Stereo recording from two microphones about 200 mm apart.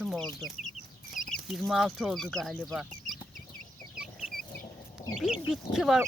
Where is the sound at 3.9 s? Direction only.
5° right (ahead or behind).